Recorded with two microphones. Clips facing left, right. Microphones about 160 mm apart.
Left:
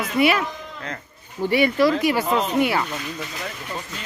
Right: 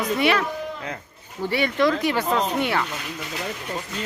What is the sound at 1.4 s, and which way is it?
Speech, 10° left (ahead or behind).